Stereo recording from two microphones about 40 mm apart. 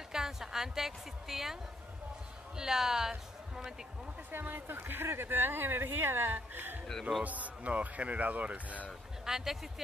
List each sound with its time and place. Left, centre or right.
0.1 s a woman's voice: centre
4.3 s speech: right
6.3 s speech: right
7.2 s speech: right
9.2 s speech: centre